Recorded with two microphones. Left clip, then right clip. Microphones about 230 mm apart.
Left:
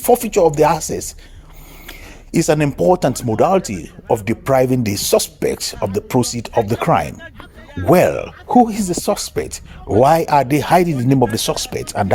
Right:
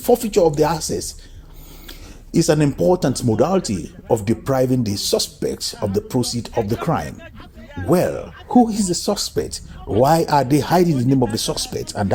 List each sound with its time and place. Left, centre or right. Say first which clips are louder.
0.0 s speech: left 2 dB; left